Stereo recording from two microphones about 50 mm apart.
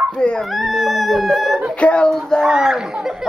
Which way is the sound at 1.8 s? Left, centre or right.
Left.